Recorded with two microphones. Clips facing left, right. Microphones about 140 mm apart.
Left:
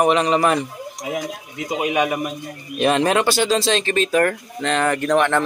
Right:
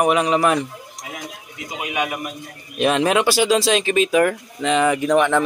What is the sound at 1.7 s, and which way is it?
Speech, 40° left (ahead or behind).